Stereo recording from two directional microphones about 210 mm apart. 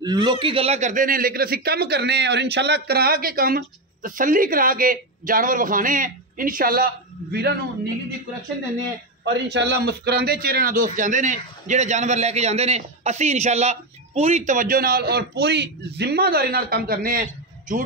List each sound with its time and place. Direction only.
0.0 s a man's voice: 20° right (ahead or behind); by 7.5 s 45° right (ahead or behind)
9.2 s a man's voice: 55° right (ahead or behind); by 17.8 s 40° right (ahead or behind)